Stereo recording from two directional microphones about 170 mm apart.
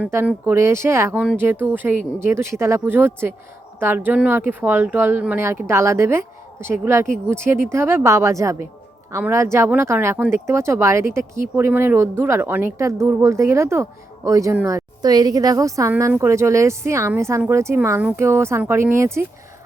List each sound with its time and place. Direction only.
0.1 s speech: 10° right (ahead or behind)